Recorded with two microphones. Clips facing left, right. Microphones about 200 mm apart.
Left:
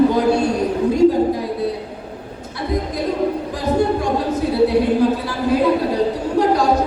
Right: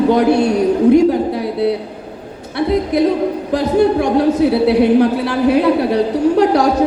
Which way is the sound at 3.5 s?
70° right (ahead or behind).